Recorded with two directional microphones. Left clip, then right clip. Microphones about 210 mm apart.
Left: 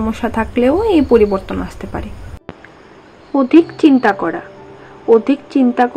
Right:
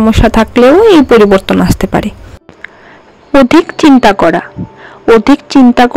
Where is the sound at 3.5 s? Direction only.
45° right (ahead or behind).